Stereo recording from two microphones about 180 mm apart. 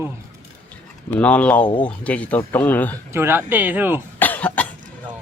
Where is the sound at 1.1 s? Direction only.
5° left (ahead or behind).